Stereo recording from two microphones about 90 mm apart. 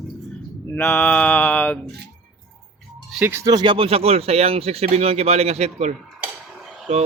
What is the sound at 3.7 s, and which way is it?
Speech, 90° right.